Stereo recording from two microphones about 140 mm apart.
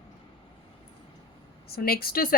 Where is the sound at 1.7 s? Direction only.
90° left.